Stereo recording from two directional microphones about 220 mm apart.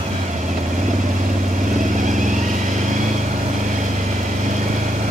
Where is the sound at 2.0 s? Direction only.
35° right (ahead or behind).